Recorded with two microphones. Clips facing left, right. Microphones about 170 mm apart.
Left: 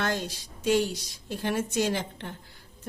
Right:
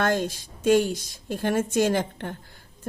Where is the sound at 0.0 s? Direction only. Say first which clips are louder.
Right 6 dB; 50° right (ahead or behind).